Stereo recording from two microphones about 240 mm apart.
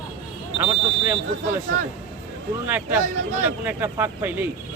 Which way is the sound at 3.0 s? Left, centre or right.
Right.